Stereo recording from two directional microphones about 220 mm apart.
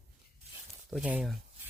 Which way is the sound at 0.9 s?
5° right (ahead or behind).